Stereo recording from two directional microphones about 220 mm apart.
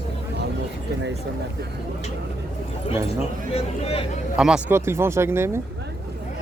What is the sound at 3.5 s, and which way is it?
Speech, 25° left (ahead or behind).